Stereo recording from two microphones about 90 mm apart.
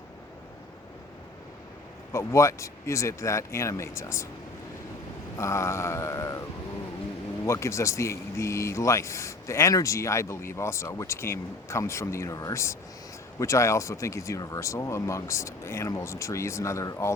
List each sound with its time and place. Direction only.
2.1 s speech: 30° left (ahead or behind)
5.4 s speech: 30° left (ahead or behind)
7.4 s speech: 30° left (ahead or behind)